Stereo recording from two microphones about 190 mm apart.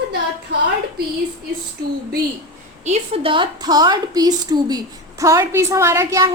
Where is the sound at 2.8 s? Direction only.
35° right (ahead or behind).